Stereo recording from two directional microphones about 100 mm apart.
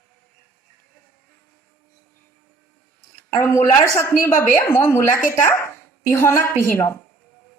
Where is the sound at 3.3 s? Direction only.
30° left (ahead or behind).